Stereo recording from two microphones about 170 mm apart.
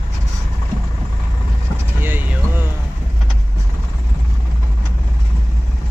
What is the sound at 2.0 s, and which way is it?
Vehicle, 10° right (ahead or behind).